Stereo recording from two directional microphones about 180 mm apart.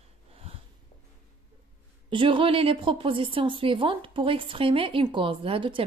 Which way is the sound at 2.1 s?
30° right (ahead or behind).